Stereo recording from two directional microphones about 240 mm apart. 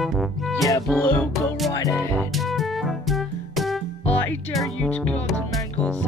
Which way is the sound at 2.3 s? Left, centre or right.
Centre.